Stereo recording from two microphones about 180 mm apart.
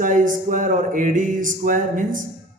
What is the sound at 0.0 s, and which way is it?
Speech, 45° right (ahead or behind).